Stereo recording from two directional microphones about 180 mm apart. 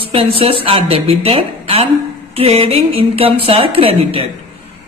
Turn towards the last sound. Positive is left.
turn(degrees=-30)  # may be behind; listen again after turning